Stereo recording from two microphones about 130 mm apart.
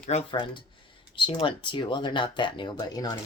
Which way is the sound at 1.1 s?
40° left (ahead or behind).